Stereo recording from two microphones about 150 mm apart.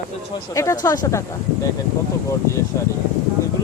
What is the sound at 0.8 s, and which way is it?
Speech, 25° left (ahead or behind).